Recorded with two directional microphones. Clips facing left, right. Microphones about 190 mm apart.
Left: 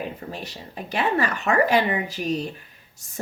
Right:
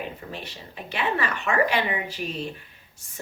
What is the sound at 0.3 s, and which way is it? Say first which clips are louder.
Speech: left 3 dB; 40° left (ahead or behind).